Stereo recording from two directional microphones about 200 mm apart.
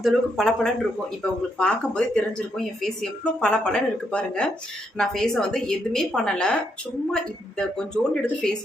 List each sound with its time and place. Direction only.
0.0 s speech: 5° left (ahead or behind)